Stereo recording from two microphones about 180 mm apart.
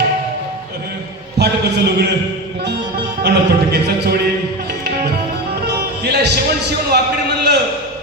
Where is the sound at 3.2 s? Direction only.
65° right (ahead or behind).